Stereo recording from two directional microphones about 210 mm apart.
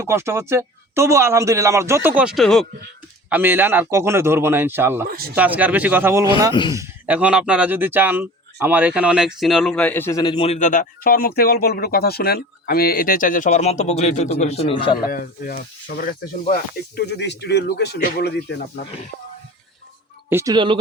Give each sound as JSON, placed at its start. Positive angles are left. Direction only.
{"t": 0.0, "sound": "speech", "side_deg": -10}
{"t": 3.2, "sound": "speech", "side_deg": -10}
{"t": 5.0, "sound": "speech", "side_deg": -45}
{"t": 5.3, "sound": "speech", "side_deg": -5}
{"t": 6.5, "sound": "speech", "side_deg": 20}
{"t": 6.7, "sound": "speech", "side_deg": -10}
{"t": 15.0, "sound": "speech", "side_deg": 45}
{"t": 17.1, "sound": "speech", "side_deg": 55}
{"t": 20.3, "sound": "speech", "side_deg": -15}